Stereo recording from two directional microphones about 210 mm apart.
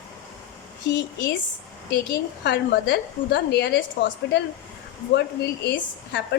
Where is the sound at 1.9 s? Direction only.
50° left (ahead or behind).